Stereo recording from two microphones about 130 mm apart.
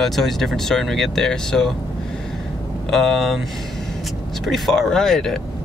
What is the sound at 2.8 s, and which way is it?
Speech, centre (ahead or behind).